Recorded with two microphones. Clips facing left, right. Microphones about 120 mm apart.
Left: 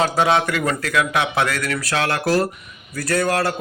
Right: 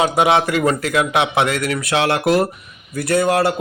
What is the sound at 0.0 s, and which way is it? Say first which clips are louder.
A man's voice: right 2 dB; 20° right (ahead or behind).